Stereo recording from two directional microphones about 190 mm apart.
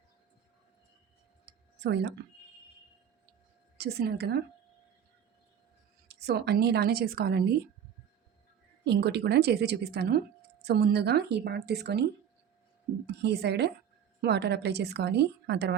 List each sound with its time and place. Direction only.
1.5 s tick-tock: 65° right (ahead or behind)
3.8 s speech: 55° right (ahead or behind)
6.1 s speech: 60° right (ahead or behind)
8.8 s speech: 60° right (ahead or behind)
13.1 s speech: 60° right (ahead or behind)